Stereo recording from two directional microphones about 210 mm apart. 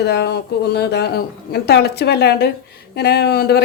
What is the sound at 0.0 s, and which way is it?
Speech, 50° left (ahead or behind).